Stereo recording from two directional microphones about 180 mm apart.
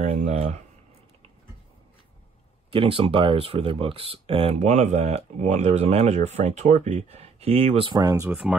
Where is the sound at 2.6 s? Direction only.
30° right (ahead or behind).